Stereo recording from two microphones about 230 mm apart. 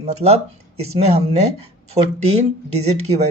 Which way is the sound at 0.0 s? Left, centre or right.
Right.